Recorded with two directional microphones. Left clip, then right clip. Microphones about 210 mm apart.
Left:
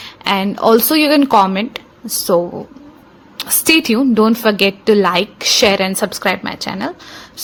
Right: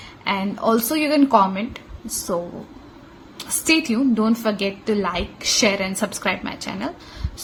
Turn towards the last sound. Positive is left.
turn(degrees=30)  # may be behind; listen again after turning